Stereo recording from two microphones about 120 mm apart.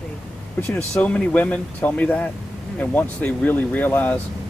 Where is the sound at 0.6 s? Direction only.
10° left (ahead or behind).